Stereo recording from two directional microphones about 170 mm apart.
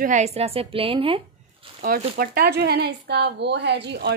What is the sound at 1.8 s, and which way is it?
Speech, 60° right (ahead or behind).